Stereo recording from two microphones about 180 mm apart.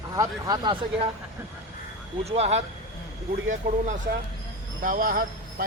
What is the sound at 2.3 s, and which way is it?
Speech, 35° right (ahead or behind).